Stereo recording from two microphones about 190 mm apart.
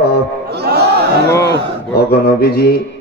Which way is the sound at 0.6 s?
60° right (ahead or behind).